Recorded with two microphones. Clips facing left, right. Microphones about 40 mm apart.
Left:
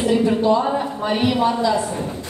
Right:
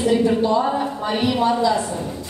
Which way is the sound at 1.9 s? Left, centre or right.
Left.